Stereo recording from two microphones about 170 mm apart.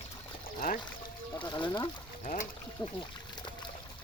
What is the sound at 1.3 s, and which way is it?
Speech, 25° left (ahead or behind).